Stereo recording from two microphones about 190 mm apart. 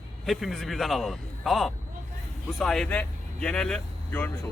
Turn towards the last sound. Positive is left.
turn(degrees=10)  # may be behind; listen again after turning